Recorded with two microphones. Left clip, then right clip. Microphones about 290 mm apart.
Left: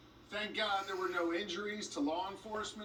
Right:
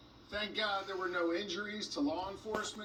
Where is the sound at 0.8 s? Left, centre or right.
Centre.